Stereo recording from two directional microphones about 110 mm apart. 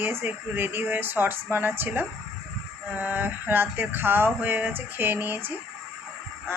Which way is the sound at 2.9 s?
15° right (ahead or behind).